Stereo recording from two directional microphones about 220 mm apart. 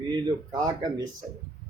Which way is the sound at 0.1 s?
15° right (ahead or behind).